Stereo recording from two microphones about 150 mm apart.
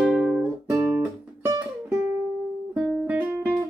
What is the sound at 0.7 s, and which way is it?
Music, 15° right (ahead or behind).